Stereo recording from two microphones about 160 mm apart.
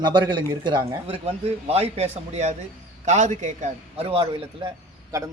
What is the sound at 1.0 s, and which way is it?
A man's voice, 40° right (ahead or behind).